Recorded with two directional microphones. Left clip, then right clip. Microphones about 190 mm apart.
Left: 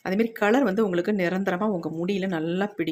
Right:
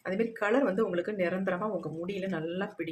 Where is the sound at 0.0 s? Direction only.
50° left (ahead or behind).